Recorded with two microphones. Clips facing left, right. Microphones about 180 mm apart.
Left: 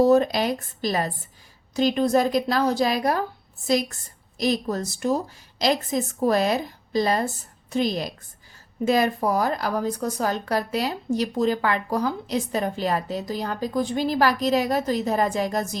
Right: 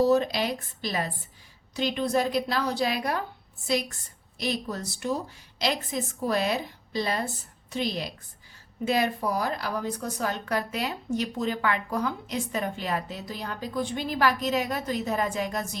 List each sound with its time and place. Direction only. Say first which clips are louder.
0.0 s a woman's voice: left 5 dB; 50° left (ahead or behind)